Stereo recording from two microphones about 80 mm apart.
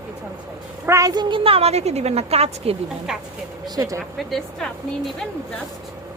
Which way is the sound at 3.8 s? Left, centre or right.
Right.